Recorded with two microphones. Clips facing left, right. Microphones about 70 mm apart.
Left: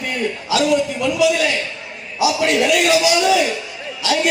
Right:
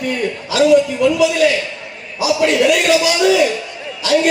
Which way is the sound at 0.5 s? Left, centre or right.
Right.